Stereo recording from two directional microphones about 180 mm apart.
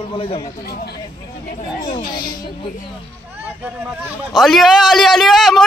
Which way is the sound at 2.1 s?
25° left (ahead or behind).